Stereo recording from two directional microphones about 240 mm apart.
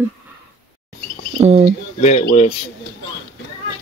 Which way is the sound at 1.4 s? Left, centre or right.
Centre.